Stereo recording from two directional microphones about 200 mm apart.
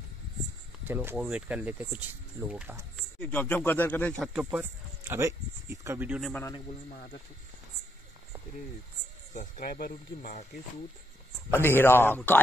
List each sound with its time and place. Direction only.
0.8 s speech: 10° right (ahead or behind)
3.2 s speech: 5° left (ahead or behind)
6.9 s speech: 50° left (ahead or behind)
9.3 s speech: 45° left (ahead or behind)
11.5 s speech: 10° left (ahead or behind)